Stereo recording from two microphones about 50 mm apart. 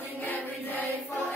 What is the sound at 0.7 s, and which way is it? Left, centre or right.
Choir, right.